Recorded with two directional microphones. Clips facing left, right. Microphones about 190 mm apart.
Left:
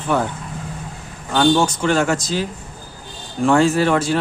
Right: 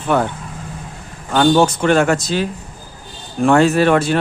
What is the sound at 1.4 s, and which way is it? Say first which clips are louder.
Speech: right 3 dB; 60° right (ahead or behind).